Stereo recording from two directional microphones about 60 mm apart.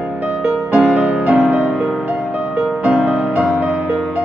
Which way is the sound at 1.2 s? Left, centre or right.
Right.